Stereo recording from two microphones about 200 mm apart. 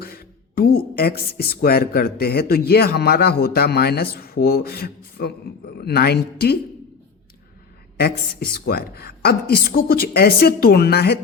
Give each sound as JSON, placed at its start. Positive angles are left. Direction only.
{"t": 0.0, "sound": "speech", "side_deg": 50}
{"t": 7.9, "sound": "speech", "side_deg": 50}